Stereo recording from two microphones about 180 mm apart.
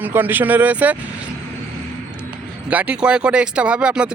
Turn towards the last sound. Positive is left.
turn(degrees=-5)  # may be behind; listen again after turning